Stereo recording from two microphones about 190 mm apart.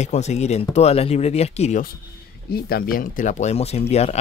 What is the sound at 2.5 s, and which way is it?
Speech, 50° left (ahead or behind).